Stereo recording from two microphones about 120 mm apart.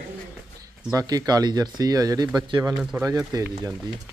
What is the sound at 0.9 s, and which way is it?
Speech, 30° right (ahead or behind).